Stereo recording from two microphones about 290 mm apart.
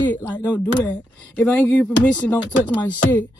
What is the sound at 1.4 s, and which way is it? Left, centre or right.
Speech, centre.